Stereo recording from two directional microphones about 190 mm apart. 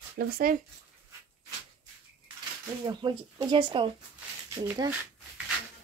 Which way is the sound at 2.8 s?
20° right (ahead or behind).